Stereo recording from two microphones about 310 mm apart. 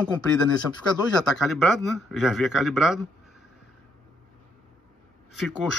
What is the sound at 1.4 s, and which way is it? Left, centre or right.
Speech, centre.